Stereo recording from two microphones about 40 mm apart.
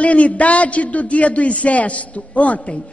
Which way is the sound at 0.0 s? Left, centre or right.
Left.